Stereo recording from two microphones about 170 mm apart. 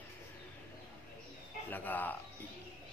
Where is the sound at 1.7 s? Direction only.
10° left (ahead or behind).